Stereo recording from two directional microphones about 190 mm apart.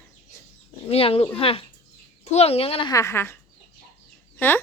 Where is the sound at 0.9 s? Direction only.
30° left (ahead or behind).